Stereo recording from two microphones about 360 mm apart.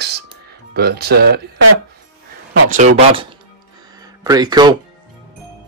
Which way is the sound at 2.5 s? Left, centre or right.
Right.